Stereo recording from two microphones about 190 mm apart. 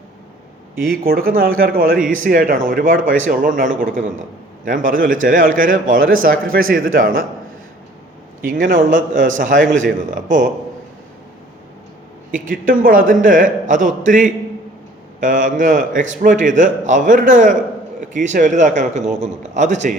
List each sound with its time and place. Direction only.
0.9 s a man's voice: 50° right (ahead or behind)
8.4 s a man's voice: 50° right (ahead or behind)
12.3 s a man's voice: 45° right (ahead or behind)